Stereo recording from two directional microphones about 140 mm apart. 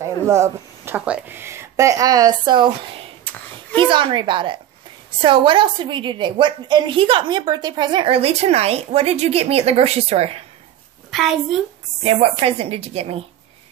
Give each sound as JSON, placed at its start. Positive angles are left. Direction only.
{"t": 0.0, "sound": "speech", "side_deg": -20}
{"t": 3.7, "sound": "a woman's voice", "side_deg": -35}
{"t": 11.1, "sound": "a woman's voice", "side_deg": 0}
{"t": 12.0, "sound": "a woman's voice", "side_deg": -45}